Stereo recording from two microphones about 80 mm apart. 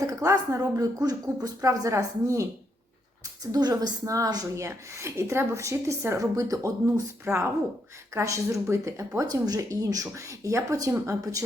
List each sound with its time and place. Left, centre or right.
0.1 s a woman's voice: right
3.5 s a woman's voice: right
4.5 s a woman's voice: right
9.2 s a woman's voice: right